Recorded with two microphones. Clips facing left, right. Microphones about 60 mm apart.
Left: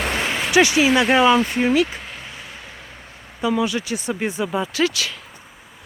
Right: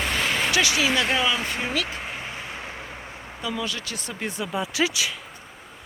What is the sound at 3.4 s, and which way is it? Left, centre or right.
Speech, centre.